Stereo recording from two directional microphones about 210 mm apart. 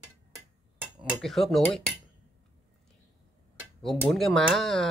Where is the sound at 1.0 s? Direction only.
Centre (ahead or behind).